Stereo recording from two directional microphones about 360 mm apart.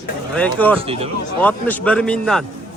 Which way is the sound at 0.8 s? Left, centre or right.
Centre.